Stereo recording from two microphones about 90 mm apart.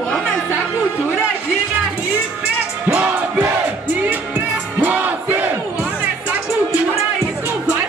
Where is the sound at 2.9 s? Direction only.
20° right (ahead or behind).